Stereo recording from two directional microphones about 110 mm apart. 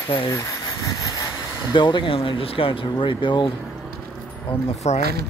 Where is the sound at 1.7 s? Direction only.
45° left (ahead or behind).